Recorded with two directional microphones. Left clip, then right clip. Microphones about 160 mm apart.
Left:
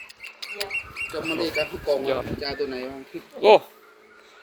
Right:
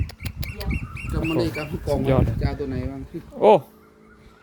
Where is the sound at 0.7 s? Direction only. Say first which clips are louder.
Left 5 dB; 60° right (ahead or behind).